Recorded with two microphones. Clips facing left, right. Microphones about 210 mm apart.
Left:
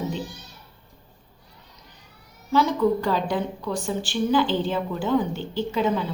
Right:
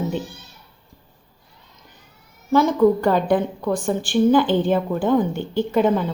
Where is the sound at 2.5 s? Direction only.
50° right (ahead or behind).